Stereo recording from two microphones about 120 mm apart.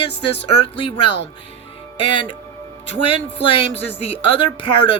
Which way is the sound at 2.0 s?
45° left (ahead or behind).